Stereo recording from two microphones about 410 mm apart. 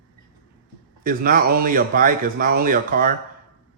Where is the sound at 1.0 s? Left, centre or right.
Right.